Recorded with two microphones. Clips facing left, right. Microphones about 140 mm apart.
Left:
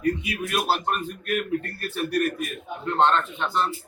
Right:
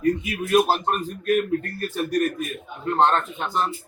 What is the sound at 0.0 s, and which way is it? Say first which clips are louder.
A man's voice: right 3 dB; 45° right (ahead or behind).